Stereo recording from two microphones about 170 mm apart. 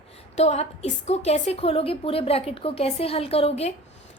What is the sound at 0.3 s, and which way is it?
A woman's voice, 40° left (ahead or behind).